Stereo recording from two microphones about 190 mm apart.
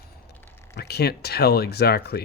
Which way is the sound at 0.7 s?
60° left (ahead or behind).